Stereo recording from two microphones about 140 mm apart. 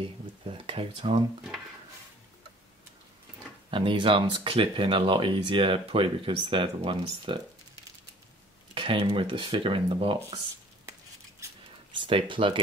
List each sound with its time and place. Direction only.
0.5 s speech: 35° right (ahead or behind)
3.7 s speech: 35° right (ahead or behind)
8.7 s speech: 40° right (ahead or behind)
11.9 s speech: 35° right (ahead or behind)